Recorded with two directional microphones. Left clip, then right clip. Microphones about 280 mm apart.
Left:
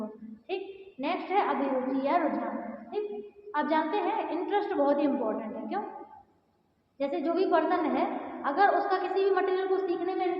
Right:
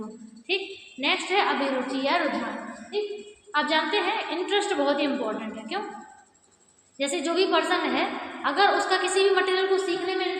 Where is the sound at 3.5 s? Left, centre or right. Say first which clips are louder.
Right 4 dB; right.